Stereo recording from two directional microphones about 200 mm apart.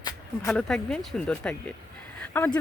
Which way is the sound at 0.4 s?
5° left (ahead or behind).